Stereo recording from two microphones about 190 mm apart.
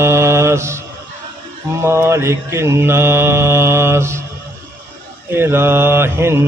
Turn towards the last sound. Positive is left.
turn(degrees=-15)  # may be behind; listen again after turning